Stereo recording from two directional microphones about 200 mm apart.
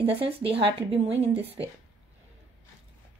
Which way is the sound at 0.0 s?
30° right (ahead or behind).